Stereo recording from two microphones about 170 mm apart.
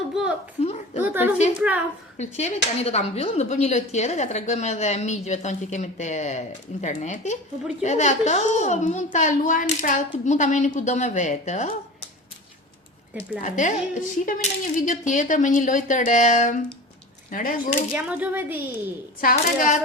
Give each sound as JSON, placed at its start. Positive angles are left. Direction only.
{"t": 0.1, "sound": "a child's voice", "side_deg": -5}
{"t": 0.6, "sound": "a woman's voice", "side_deg": 40}
{"t": 1.0, "sound": "a woman's voice", "side_deg": -10}
{"t": 2.1, "sound": "speech", "side_deg": 40}
{"t": 13.4, "sound": "speech", "side_deg": 50}
{"t": 17.9, "sound": "a woman's voice", "side_deg": -10}
{"t": 19.2, "sound": "speech", "side_deg": 55}